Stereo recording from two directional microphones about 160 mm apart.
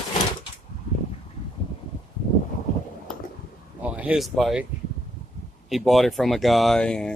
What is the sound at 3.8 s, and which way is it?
Speech, 10° right (ahead or behind).